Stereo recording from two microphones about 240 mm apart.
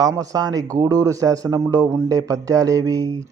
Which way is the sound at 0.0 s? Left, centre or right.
Centre.